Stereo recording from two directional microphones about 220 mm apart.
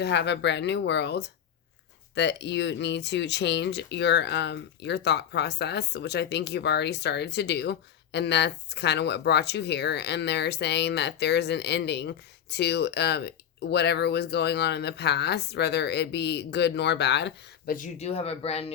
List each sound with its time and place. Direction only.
0.0 s speech: 50° left (ahead or behind)
17.7 s speech: 35° left (ahead or behind)